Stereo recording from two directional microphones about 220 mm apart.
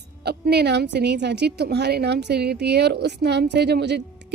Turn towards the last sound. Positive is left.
turn(degrees=-50)  # may be behind; listen again after turning